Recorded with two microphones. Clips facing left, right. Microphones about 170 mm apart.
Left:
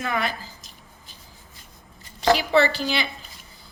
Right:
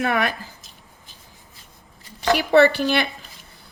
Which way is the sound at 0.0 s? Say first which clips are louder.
Right 5 dB; 65° right (ahead or behind).